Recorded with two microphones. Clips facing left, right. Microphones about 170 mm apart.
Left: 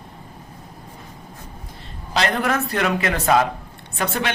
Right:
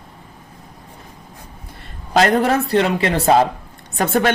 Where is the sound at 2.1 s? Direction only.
45° right (ahead or behind).